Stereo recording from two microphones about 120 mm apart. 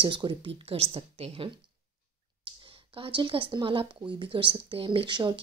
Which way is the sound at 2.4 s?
45° right (ahead or behind).